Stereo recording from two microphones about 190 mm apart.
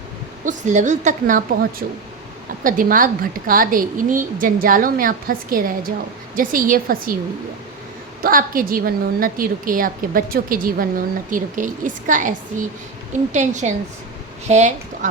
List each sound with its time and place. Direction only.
0.4 s a woman's voice: 40° right (ahead or behind)
1.8 s a woman's voice: 55° right (ahead or behind)
8.2 s a woman's voice: 50° right (ahead or behind)